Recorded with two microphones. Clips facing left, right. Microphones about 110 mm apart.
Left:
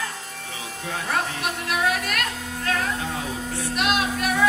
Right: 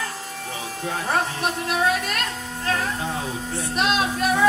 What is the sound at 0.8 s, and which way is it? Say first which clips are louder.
Music: right 2 dB; 35° right (ahead or behind).